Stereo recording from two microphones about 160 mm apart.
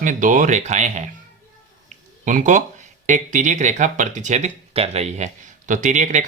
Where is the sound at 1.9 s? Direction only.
50° right (ahead or behind).